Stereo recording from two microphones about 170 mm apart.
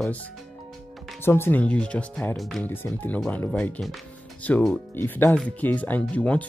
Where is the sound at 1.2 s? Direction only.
15° left (ahead or behind).